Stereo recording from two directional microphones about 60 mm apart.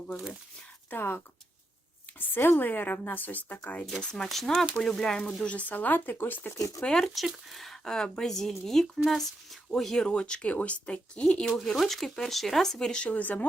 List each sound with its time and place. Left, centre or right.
0.9 s speech: left
4.0 s speech: centre
5.4 s speech: left
6.9 s speech: centre
13.1 s speech: left